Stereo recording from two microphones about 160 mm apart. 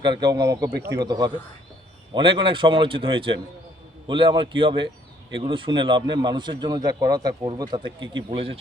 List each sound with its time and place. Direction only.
0.0 s a man's voice: 30° right (ahead or behind)